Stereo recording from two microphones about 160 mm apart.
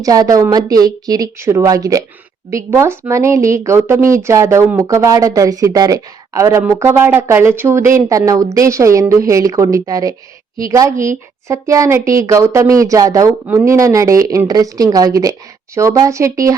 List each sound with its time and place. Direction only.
0.0 s speech: 20° right (ahead or behind)